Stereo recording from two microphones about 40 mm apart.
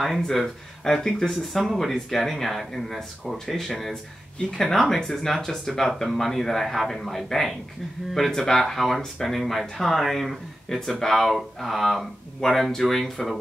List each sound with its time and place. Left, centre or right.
0.0 s speech: centre